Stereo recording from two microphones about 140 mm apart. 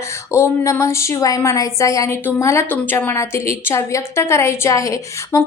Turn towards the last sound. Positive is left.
turn(degrees=25)  # may be behind; listen again after turning